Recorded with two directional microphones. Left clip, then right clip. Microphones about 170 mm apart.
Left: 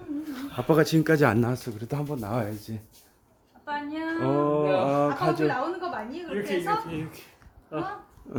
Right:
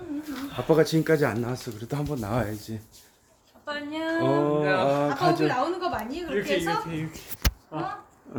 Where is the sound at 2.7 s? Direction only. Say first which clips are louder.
Right 2 dB; 35° left (ahead or behind).